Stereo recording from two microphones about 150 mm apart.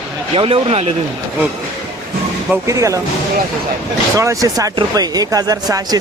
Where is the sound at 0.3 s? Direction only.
40° right (ahead or behind).